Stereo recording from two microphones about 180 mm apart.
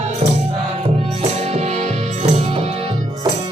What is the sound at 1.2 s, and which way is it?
Music, 35° right (ahead or behind).